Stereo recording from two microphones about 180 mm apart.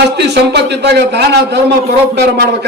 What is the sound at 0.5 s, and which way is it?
A man's voice, 70° right (ahead or behind).